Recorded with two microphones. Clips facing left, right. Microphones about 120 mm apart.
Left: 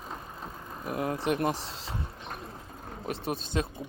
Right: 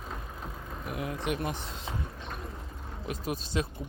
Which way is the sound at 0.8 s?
40° left (ahead or behind).